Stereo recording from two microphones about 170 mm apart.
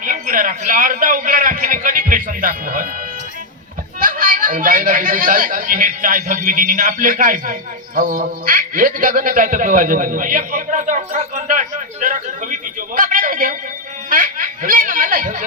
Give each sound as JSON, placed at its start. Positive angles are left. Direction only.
{"t": 0.0, "sound": "a woman's voice", "side_deg": -55}
{"t": 4.0, "sound": "a woman's voice", "side_deg": -55}
{"t": 14.1, "sound": "a sound", "side_deg": -55}